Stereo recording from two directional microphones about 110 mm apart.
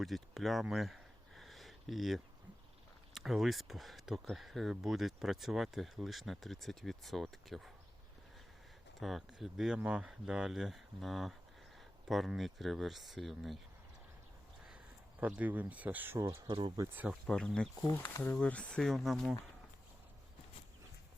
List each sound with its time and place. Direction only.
0.0 s a sound: centre (ahead or behind)
3.2 s speech: centre (ahead or behind)
9.0 s speech: centre (ahead or behind)
15.2 s speech: 15° right (ahead or behind)
16.2 s speech: 30° right (ahead or behind)
16.9 s speech: 15° right (ahead or behind)
17.2 s speech: 5° left (ahead or behind)